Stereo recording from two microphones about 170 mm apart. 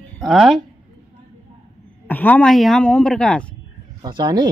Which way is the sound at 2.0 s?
10° left (ahead or behind).